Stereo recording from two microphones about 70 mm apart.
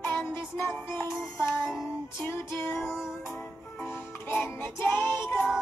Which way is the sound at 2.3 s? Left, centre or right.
Left.